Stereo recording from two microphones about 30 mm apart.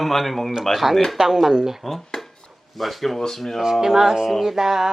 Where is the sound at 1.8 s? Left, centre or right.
Centre.